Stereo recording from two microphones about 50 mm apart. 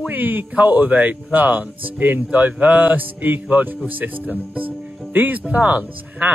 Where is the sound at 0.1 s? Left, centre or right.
Right.